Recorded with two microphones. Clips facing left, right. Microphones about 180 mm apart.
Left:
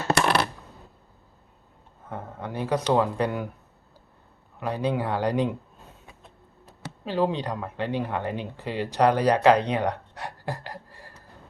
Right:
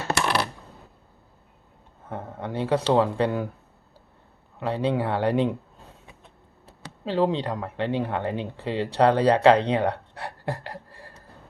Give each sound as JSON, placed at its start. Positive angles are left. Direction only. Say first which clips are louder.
{"t": 2.0, "sound": "speech", "louder": "right 2 dB", "side_deg": -25}
{"t": 4.6, "sound": "speech", "louder": "right 2 dB", "side_deg": -25}
{"t": 6.7, "sound": "speech", "louder": "right 3 dB", "side_deg": -30}